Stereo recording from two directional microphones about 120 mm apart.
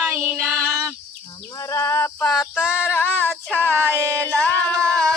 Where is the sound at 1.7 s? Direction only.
25° left (ahead or behind).